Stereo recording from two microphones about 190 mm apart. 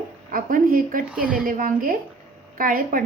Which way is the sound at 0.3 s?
45° right (ahead or behind).